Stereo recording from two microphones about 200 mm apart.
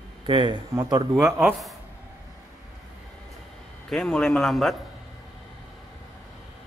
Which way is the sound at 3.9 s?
Centre (ahead or behind).